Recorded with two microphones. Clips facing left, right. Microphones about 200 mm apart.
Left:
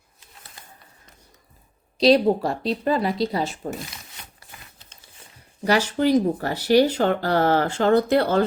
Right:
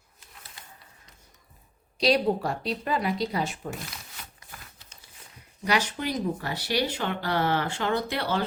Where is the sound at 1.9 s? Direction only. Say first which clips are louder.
Left 7 dB; 35° left (ahead or behind).